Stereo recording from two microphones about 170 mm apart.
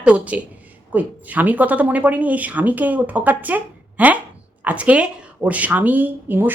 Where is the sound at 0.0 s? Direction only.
5° right (ahead or behind).